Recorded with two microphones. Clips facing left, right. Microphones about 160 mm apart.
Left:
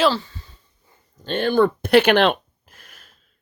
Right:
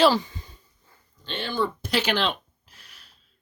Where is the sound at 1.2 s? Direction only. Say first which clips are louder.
Left 10 dB; 50° left (ahead or behind).